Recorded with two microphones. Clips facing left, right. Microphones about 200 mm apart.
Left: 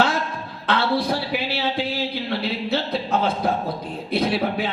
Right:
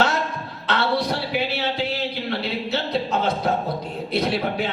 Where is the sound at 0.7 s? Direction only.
55° left (ahead or behind).